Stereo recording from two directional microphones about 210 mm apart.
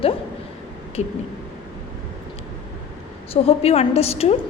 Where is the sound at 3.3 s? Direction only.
30° left (ahead or behind).